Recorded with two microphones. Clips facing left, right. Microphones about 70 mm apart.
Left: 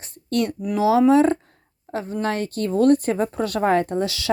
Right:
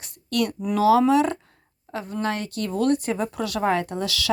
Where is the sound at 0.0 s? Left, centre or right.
Left.